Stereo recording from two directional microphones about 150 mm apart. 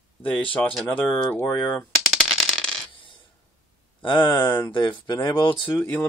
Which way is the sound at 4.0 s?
30° left (ahead or behind).